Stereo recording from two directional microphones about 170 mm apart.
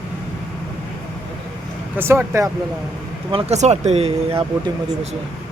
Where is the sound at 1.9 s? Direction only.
15° right (ahead or behind).